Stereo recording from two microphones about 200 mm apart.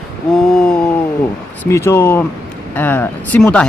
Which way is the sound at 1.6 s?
15° left (ahead or behind).